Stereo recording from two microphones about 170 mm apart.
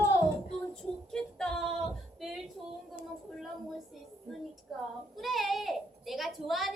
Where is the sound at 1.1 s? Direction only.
5° left (ahead or behind).